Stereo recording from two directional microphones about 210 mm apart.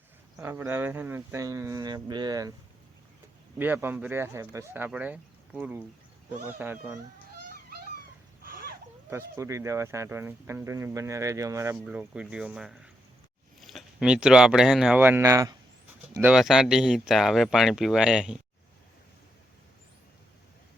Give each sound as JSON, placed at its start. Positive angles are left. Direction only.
{"t": 0.3, "sound": "speech", "side_deg": -10}
{"t": 3.6, "sound": "speech", "side_deg": -10}
{"t": 8.4, "sound": "a sound", "side_deg": -45}
{"t": 9.0, "sound": "speech", "side_deg": -10}